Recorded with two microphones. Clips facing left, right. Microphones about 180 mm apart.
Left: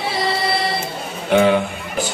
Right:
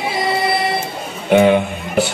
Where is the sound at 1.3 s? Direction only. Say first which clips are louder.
Right 3 dB; 20° right (ahead or behind).